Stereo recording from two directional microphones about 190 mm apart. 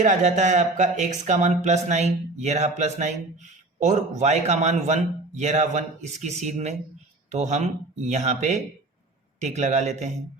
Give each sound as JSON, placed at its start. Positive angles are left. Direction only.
{"t": 0.0, "sound": "speech", "side_deg": -40}